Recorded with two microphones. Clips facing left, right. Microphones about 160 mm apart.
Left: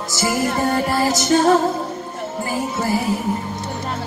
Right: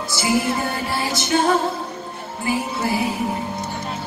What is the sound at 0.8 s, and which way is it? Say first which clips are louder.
Music: left 6 dB; 45° left (ahead or behind).